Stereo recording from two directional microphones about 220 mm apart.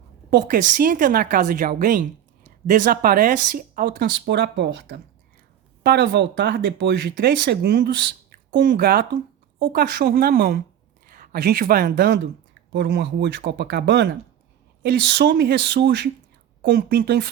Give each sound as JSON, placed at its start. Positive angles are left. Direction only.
{"t": 0.3, "sound": "speech", "side_deg": -40}